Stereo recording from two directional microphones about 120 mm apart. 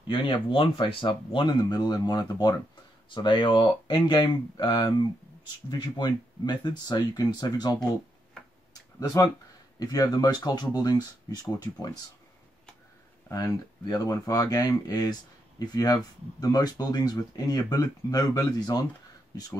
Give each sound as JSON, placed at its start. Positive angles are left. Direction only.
{"t": 0.0, "sound": "speech", "side_deg": 45}
{"t": 9.0, "sound": "speech", "side_deg": 30}
{"t": 13.3, "sound": "speech", "side_deg": 30}